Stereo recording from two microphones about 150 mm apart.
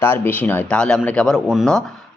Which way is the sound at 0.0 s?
15° left (ahead or behind).